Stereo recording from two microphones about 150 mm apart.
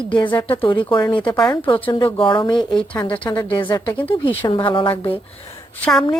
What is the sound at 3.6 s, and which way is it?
Speech, 30° left (ahead or behind).